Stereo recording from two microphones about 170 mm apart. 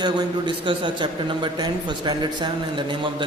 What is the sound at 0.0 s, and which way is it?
A man's voice, 25° right (ahead or behind).